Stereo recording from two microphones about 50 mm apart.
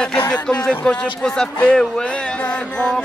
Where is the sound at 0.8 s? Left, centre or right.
Left.